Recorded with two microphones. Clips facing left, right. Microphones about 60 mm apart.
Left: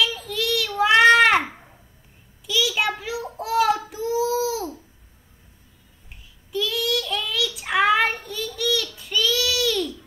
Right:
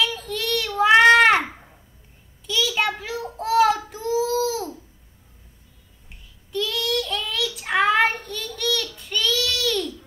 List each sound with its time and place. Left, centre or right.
0.0 s a sound: centre
2.4 s child singing: centre
6.5 s child singing: centre